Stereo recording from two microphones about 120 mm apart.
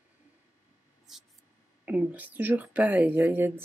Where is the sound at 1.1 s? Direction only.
5° right (ahead or behind).